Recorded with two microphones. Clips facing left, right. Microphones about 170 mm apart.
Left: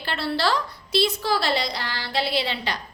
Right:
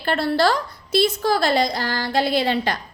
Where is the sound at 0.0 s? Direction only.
50° right (ahead or behind).